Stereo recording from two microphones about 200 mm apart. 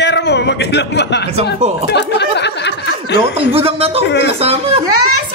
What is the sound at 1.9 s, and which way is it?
Chuckle, 60° left (ahead or behind).